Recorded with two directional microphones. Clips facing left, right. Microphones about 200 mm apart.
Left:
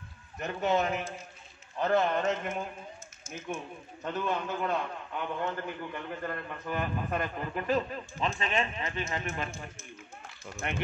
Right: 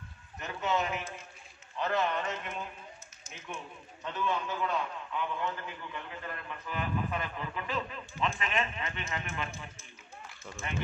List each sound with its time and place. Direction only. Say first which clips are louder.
0.4 s a man's voice: left 4 dB; 50° left (ahead or behind)
10.6 s speech: left 4 dB; 70° left (ahead or behind)